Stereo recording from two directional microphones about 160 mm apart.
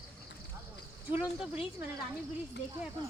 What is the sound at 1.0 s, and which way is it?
Speech, 10° right (ahead or behind).